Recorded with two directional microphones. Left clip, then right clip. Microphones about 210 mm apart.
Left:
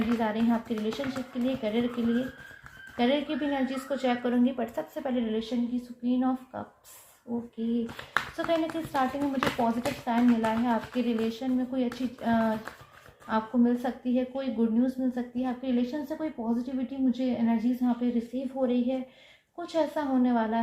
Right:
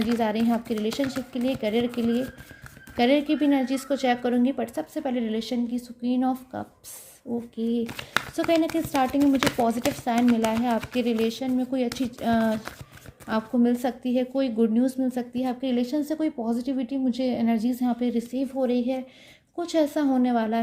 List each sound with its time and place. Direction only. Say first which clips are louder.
0.2 s a woman's voice: right 3 dB; 50° right (ahead or behind)
2.9 s a woman's voice: right 5 dB; 55° right (ahead or behind)
7.3 s speech: right 4 dB; 40° right (ahead or behind)
7.6 s a woman's voice: right 5 dB; 50° right (ahead or behind)